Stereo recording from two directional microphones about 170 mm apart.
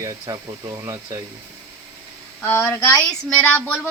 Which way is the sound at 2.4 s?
10° left (ahead or behind).